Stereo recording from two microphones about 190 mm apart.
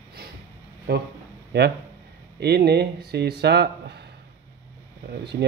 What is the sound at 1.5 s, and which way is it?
Speech, 60° right (ahead or behind).